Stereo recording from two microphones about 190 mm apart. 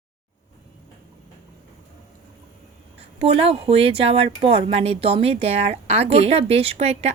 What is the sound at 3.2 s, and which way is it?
Speech, 30° right (ahead or behind).